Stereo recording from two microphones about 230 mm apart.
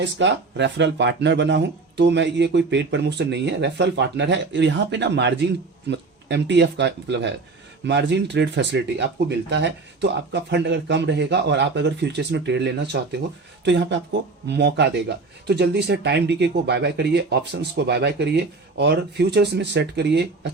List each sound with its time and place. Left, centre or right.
0.0 s speech: right